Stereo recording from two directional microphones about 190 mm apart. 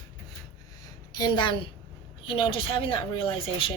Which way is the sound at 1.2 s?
25° left (ahead or behind).